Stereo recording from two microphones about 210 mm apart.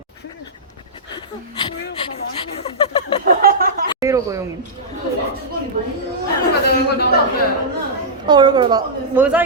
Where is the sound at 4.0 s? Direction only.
15° right (ahead or behind).